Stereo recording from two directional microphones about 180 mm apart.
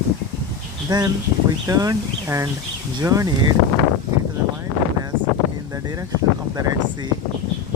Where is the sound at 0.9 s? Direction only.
25° right (ahead or behind).